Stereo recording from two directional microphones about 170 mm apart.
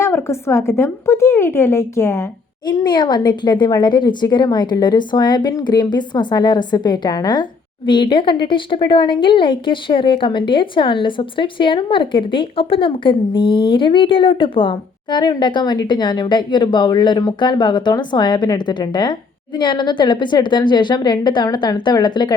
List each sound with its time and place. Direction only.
0.0 s a woman's voice: 15° left (ahead or behind)
2.6 s speech: 25° left (ahead or behind)